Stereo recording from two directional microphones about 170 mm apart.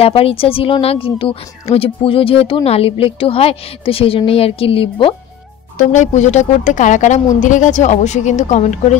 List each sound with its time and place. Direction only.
0.0 s speech: 35° left (ahead or behind)
5.8 s speech: 45° left (ahead or behind)